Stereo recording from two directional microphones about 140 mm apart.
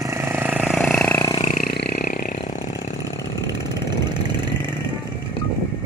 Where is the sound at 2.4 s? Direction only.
60° left (ahead or behind).